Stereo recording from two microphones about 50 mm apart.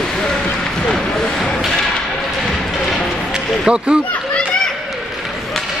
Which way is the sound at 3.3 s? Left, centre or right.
Centre.